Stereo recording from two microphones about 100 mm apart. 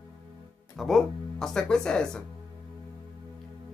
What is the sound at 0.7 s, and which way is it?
Speech, centre (ahead or behind).